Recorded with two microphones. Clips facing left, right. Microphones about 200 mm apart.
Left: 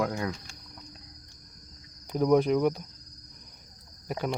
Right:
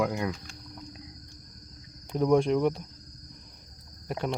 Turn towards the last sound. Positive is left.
turn(degrees=0)  # may be behind; listen again after turning